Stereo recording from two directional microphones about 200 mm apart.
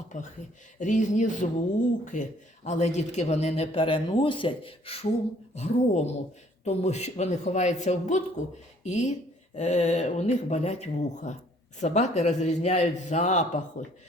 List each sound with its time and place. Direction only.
0.1 s a man's voice: 35° left (ahead or behind)